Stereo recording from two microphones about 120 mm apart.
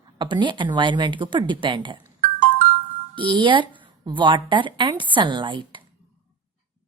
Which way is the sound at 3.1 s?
45° right (ahead or behind).